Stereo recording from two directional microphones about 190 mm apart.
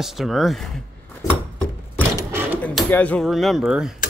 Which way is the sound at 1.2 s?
20° left (ahead or behind).